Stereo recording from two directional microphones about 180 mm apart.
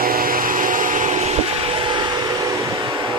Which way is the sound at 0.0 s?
55° right (ahead or behind).